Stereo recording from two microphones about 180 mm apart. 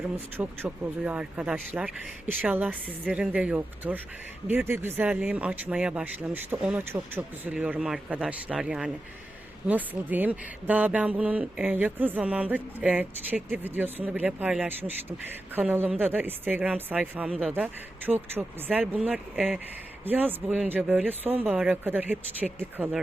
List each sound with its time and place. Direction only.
0.3 s speech: 10° right (ahead or behind)